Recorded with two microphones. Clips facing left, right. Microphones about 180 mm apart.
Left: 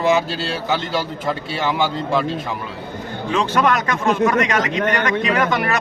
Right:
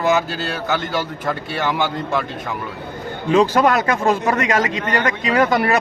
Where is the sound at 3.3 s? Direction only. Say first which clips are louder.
Right 4 dB; 35° right (ahead or behind).